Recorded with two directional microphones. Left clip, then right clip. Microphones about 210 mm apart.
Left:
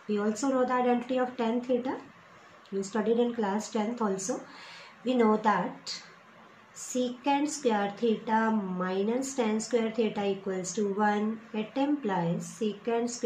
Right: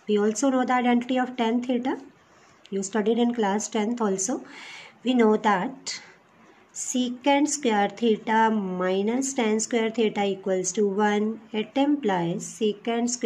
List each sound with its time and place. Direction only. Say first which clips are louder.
0.1 s speech: right 6 dB; 55° right (ahead or behind)
6.9 s speech: right 5 dB; 55° right (ahead or behind)